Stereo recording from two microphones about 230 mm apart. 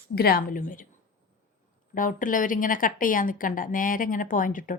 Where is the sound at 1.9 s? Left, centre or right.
Left.